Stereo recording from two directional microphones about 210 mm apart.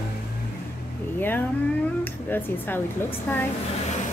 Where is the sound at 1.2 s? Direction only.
10° left (ahead or behind).